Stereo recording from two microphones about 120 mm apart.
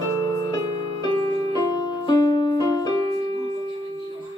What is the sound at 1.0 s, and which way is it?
Music, 30° left (ahead or behind).